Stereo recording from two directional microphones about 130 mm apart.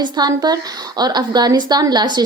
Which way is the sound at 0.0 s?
30° right (ahead or behind).